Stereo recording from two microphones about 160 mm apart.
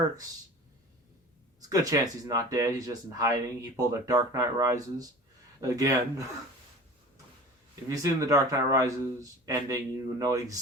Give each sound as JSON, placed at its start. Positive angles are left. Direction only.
{"t": 1.7, "sound": "speech", "side_deg": -20}
{"t": 7.9, "sound": "speech", "side_deg": -20}